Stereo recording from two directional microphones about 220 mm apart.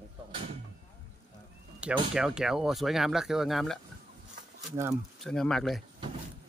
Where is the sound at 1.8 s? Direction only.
5° right (ahead or behind).